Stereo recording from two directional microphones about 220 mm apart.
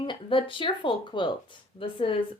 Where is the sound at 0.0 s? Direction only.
20° left (ahead or behind).